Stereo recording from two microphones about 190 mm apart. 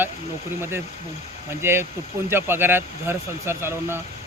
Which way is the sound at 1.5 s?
15° right (ahead or behind).